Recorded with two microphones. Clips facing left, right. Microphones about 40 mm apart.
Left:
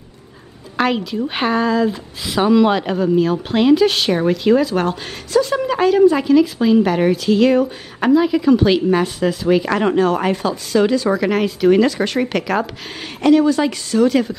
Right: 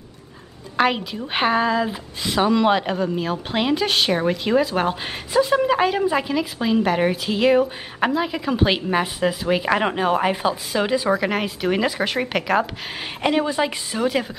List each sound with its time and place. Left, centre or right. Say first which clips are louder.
0.7 s speech: left 2 dB; centre
2.2 s speech: left 4 dB; centre
13.2 s a woman's voice: left 7 dB; right